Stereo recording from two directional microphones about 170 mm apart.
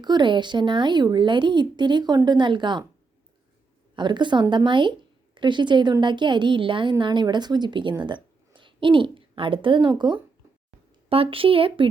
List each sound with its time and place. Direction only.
0.0 s a woman's voice: 25° right (ahead or behind)
3.9 s a woman's voice: 25° right (ahead or behind)